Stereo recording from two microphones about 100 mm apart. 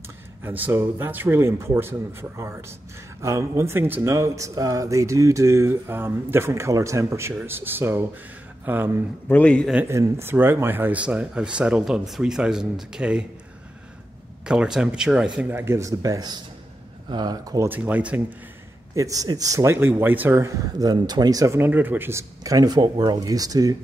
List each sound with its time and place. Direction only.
0.4 s speech: 20° right (ahead or behind)
9.3 s a man's voice: 10° left (ahead or behind)
9.8 s speech: 30° right (ahead or behind); by 13.3 s 10° right (ahead or behind)
14.4 s speech: 10° right (ahead or behind)
15.5 s speech: 25° right (ahead or behind); by 17.6 s 45° right (ahead or behind)
17.6 s speech: 20° right (ahead or behind)
18.9 s speech: 35° right (ahead or behind)
20.8 s speech: 45° right (ahead or behind)
21.5 s speech: 20° right (ahead or behind)
22.4 s speech: 35° right (ahead or behind)